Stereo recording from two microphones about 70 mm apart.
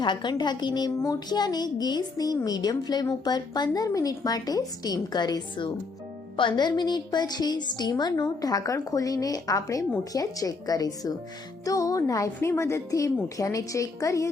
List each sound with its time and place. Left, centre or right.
0.0 s a woman's voice: left
3.2 s speech: left
3.8 s a woman's voice: left
6.6 s a woman's voice: left
8.2 s a woman's voice: left